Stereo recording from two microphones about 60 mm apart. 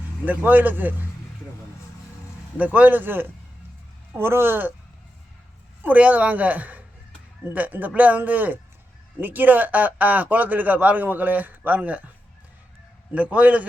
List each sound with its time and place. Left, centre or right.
0.3 s a man's voice: right
2.7 s a man's voice: right
5.8 s speech: right
13.1 s speech: right